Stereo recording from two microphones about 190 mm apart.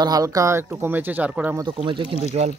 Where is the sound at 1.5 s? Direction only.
25° right (ahead or behind).